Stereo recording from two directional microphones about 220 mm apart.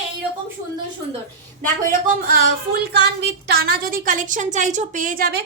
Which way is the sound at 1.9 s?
40° right (ahead or behind).